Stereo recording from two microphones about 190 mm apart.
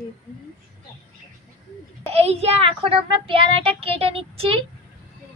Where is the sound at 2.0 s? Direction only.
30° right (ahead or behind).